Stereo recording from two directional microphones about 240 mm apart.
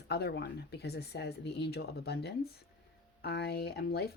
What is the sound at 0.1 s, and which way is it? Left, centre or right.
Speech, left.